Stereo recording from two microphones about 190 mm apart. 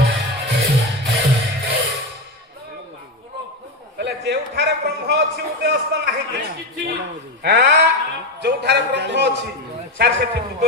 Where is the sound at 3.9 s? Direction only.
60° right (ahead or behind).